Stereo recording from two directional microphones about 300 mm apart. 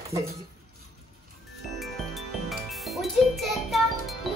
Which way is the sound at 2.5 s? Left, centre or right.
Centre.